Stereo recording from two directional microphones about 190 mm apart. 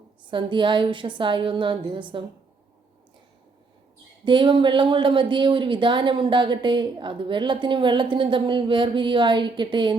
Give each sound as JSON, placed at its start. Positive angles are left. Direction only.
{"t": 0.3, "sound": "speech", "side_deg": -25}
{"t": 4.3, "sound": "speech", "side_deg": -25}